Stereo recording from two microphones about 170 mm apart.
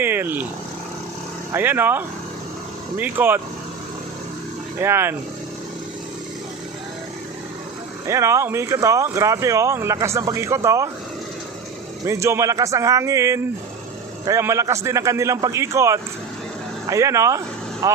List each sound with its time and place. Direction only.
0.0 s speech: 10° right (ahead or behind)
1.5 s speech: 10° right (ahead or behind)
4.8 s speech: 15° right (ahead or behind)
8.0 s speech: 15° right (ahead or behind)
12.0 s a man's voice: 15° right (ahead or behind)